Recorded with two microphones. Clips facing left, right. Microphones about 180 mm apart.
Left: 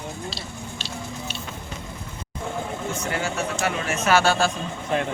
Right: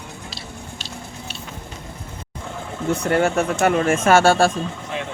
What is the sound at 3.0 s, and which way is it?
Speech, 55° right (ahead or behind).